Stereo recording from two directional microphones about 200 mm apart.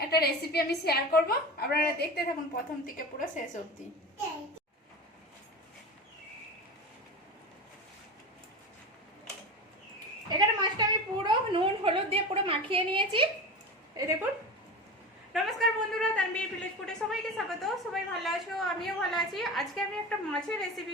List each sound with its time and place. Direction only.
0.1 s a woman's voice: 50° left (ahead or behind)
10.2 s a sound: 20° right (ahead or behind)
14.0 s speech: 20° right (ahead or behind)
15.3 s a woman's voice: centre (ahead or behind)